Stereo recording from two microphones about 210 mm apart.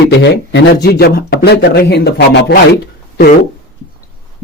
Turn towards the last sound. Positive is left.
turn(degrees=50)  # may be behind; listen again after turning